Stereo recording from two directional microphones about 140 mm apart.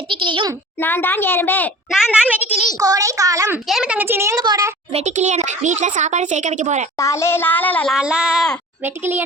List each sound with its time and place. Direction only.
0.1 s a woman's voice: 35° right (ahead or behind)
0.8 s speech: 15° left (ahead or behind)
2.2 s a child's voice: 10° right (ahead or behind)
2.7 s a child's voice: 25° right (ahead or behind)
3.7 s a child's voice: 5° right (ahead or behind); by 4.7 s 25° right (ahead or behind)
4.9 s a child's voice: 50° right (ahead or behind)
7.0 s speech: 20° left (ahead or behind)
7.9 s a child's voice: 5° right (ahead or behind)